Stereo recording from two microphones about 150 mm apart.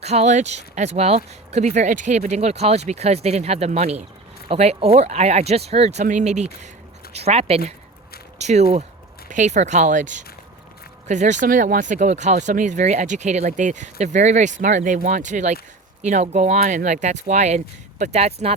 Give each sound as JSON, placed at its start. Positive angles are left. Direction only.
{"t": 0.0, "sound": "speech", "side_deg": -45}